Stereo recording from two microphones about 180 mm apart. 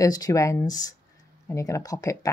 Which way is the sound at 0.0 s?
20° left (ahead or behind).